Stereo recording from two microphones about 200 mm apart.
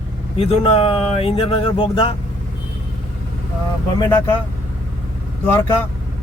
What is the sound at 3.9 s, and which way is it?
Speech, 20° left (ahead or behind).